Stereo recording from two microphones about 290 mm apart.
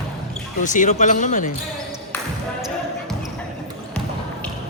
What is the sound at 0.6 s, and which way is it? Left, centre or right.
Speech, left.